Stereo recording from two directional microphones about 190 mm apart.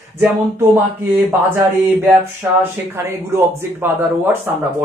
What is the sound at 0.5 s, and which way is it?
Speech, 10° right (ahead or behind).